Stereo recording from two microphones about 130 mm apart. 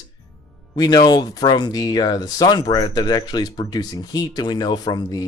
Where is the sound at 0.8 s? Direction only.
35° left (ahead or behind).